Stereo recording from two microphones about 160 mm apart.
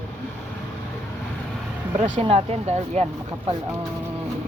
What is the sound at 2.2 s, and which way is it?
A woman's voice, 40° right (ahead or behind).